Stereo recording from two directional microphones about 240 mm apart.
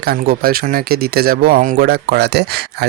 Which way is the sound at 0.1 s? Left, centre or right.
Right.